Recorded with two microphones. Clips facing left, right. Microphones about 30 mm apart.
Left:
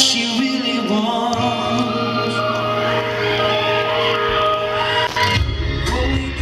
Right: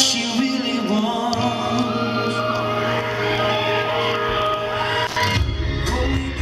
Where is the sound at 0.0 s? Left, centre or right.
Left.